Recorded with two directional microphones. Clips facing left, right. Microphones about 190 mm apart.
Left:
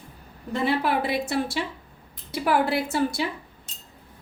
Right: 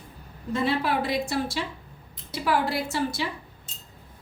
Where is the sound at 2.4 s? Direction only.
55° left (ahead or behind).